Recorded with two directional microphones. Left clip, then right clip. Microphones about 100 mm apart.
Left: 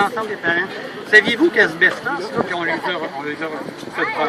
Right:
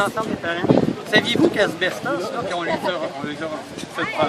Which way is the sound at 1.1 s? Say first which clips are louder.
Left 7 dB; 45° right (ahead or behind).